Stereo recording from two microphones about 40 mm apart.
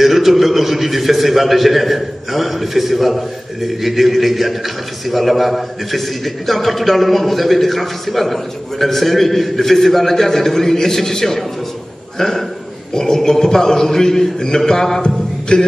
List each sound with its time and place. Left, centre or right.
0.0 s a man's voice: centre
15.5 s music: left